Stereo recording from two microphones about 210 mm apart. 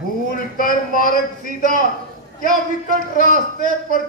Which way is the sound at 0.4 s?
40° left (ahead or behind).